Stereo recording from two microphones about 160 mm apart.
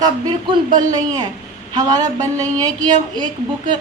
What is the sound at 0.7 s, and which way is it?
A woman's voice, 25° right (ahead or behind).